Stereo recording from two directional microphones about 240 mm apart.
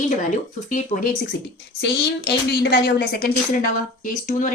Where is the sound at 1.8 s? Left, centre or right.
Left.